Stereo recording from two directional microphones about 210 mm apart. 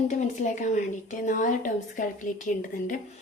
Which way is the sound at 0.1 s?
35° left (ahead or behind).